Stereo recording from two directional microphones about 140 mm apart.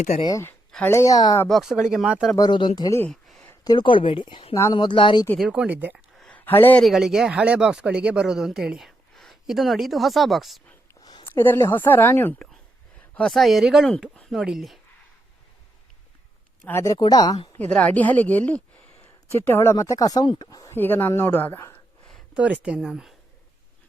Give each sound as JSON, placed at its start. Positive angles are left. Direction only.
{"t": 0.2, "sound": "speech", "side_deg": 30}
{"t": 1.5, "sound": "speech", "side_deg": 0}
{"t": 2.3, "sound": "speech", "side_deg": 30}
{"t": 3.1, "sound": "a sound", "side_deg": 5}
{"t": 3.6, "sound": "speech", "side_deg": 30}
{"t": 5.4, "sound": "speech", "side_deg": -5}
{"t": 6.1, "sound": "a sound", "side_deg": 10}
{"t": 6.8, "sound": "speech", "side_deg": 0}
{"t": 11.3, "sound": "a woman's voice", "side_deg": 20}
{"t": 13.1, "sound": "speech", "side_deg": 5}
{"t": 16.6, "sound": "speech", "side_deg": 20}
{"t": 17.6, "sound": "a woman's voice", "side_deg": 10}
{"t": 20.7, "sound": "a woman's voice", "side_deg": 15}
{"t": 22.4, "sound": "speech", "side_deg": -10}